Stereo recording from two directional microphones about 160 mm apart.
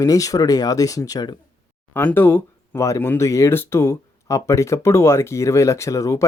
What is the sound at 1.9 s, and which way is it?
Speech, 15° left (ahead or behind).